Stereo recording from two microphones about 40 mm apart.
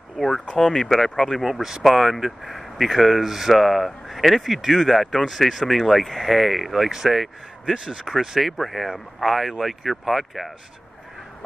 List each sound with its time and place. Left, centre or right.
0.2 s speech: centre
1.4 s speech: centre
7.7 s speech: right
8.0 s speech: centre